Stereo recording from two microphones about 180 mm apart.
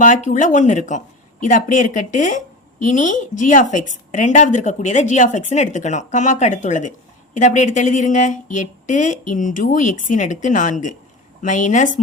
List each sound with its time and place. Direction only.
0.0 s speech: 45° left (ahead or behind)